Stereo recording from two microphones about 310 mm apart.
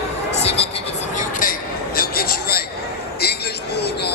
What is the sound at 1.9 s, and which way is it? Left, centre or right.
Vehicle, left.